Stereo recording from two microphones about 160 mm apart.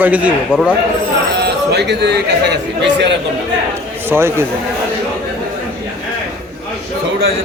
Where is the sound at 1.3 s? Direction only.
90° right.